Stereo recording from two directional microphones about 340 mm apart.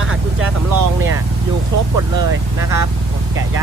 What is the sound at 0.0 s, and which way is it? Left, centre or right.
Vehicle, right.